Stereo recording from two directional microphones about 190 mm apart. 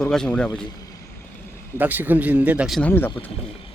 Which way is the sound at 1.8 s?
10° right (ahead or behind).